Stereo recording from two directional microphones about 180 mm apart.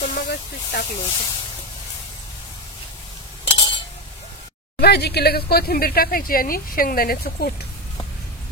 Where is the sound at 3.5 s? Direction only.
30° left (ahead or behind).